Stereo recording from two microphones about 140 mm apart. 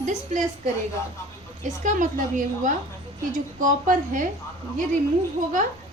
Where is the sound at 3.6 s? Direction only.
70° right (ahead or behind).